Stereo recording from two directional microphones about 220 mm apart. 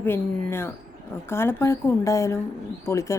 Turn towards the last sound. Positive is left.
turn(degrees=15)  # may be behind; listen again after turning